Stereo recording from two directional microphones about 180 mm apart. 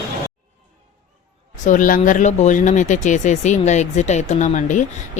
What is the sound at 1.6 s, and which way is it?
A man's voice, 45° left (ahead or behind).